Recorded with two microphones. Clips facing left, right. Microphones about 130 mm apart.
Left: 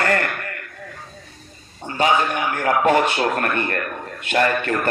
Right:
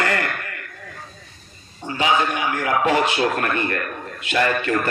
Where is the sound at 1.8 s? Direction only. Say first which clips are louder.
Left 1 dB; 45° left (ahead or behind).